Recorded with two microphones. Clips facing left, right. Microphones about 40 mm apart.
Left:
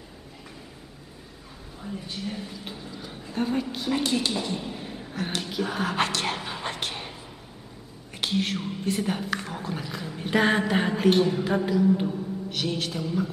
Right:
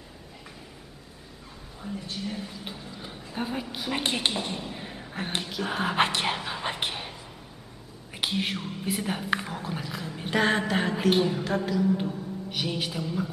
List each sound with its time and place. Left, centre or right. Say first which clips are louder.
1.8 s speech: even; centre
3.9 s a woman's voice: left 2 dB; right
4.6 s a sound: left 2 dB; centre
5.7 s speech: right 3 dB; centre
8.1 s speech: left 2 dB; centre
11.4 s speech: left 3 dB; centre
12.4 s speech: even; centre